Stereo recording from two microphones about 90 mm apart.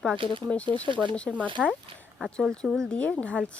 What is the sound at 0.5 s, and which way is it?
Speech, 15° left (ahead or behind).